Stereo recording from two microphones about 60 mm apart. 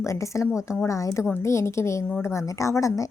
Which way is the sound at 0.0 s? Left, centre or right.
Left.